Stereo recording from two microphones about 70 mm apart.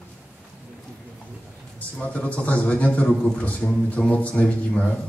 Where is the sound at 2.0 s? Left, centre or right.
Centre.